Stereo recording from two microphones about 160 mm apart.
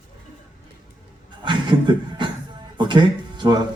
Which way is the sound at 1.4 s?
30° right (ahead or behind).